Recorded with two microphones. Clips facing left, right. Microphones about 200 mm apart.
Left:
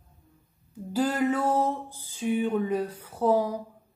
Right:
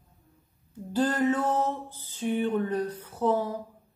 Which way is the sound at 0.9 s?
10° left (ahead or behind).